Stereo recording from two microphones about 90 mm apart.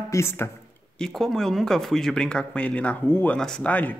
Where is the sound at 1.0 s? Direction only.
5° left (ahead or behind); by 3.4 s 20° left (ahead or behind).